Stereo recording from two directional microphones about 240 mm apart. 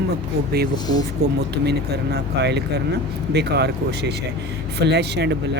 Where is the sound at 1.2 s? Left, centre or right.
Right.